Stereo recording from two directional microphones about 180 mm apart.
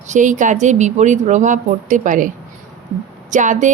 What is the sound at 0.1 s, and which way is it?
A woman's voice, 45° right (ahead or behind).